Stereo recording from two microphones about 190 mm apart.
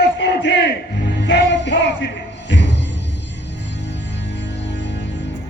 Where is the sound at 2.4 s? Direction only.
65° left (ahead or behind).